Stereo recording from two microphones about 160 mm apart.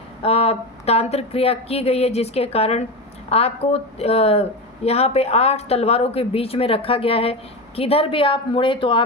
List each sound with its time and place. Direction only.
0.2 s speech: 40° left (ahead or behind)